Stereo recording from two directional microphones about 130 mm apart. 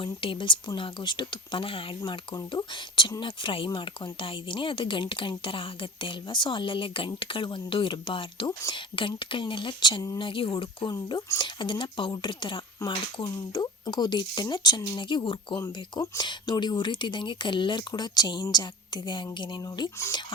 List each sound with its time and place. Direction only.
0.0 s speech: 40° left (ahead or behind)